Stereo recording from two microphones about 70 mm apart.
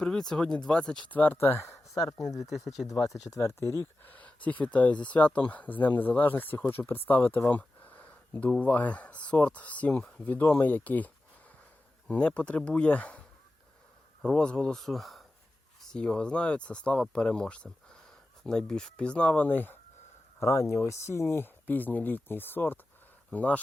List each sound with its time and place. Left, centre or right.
0.0 s speech: centre
1.1 s speech: left
2.4 s speech: centre
3.2 s speech: left
3.6 s speech: left
4.0 s speech: left
10.0 s speech: centre
10.2 s speech: left
14.3 s speech: centre; by 19.8 s left
20.4 s speech: left